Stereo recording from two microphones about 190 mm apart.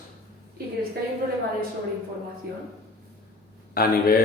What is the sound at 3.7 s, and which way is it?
Speech, 55° left (ahead or behind).